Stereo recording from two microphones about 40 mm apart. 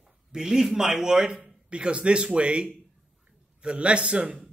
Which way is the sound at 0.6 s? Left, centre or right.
Centre.